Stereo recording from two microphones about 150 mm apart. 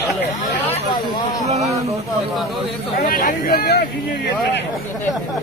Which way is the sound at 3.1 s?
75° left (ahead or behind).